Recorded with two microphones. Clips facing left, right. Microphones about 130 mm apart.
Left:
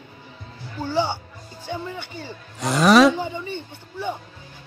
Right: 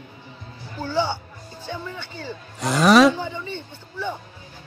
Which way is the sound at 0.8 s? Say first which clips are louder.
Left 1 dB; 20° left (ahead or behind).